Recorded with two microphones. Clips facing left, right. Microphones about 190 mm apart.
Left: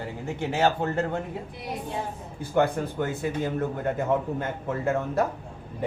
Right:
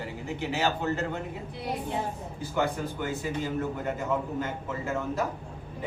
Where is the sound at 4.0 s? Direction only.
55° left (ahead or behind).